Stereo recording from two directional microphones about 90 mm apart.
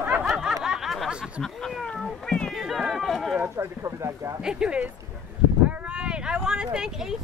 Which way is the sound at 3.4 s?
30° right (ahead or behind).